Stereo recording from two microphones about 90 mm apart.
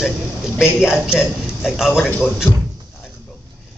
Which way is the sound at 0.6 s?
5° right (ahead or behind).